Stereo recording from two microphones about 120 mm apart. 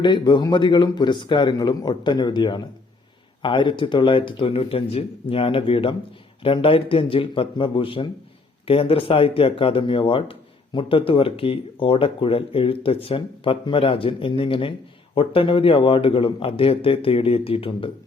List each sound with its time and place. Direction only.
0.0 s speech: 40° left (ahead or behind)